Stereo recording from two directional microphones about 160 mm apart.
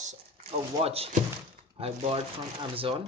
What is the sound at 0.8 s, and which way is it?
Speech, 40° right (ahead or behind).